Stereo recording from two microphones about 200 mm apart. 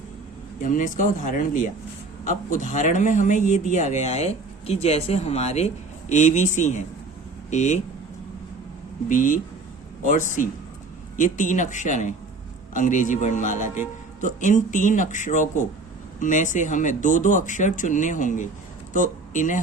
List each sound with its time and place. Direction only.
0.6 s speech: 40° left (ahead or behind)
9.0 s speech: 40° left (ahead or behind)